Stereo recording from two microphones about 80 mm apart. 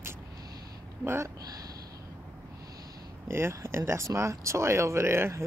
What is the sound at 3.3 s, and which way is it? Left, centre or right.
Speech, right.